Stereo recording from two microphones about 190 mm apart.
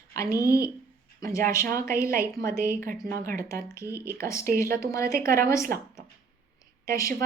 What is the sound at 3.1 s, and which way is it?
Speech, 50° right (ahead or behind).